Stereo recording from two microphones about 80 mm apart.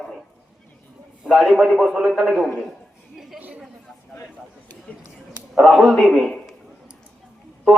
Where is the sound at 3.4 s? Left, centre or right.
Centre.